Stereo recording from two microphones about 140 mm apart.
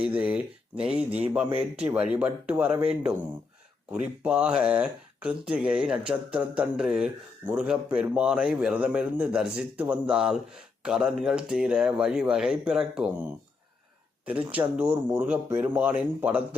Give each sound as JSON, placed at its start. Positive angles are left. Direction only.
{"t": 0.0, "sound": "speech", "side_deg": -10}
{"t": 1.5, "sound": "speech", "side_deg": -45}
{"t": 1.9, "sound": "speech", "side_deg": -10}
{"t": 4.0, "sound": "speech", "side_deg": -10}
{"t": 14.3, "sound": "speech", "side_deg": -10}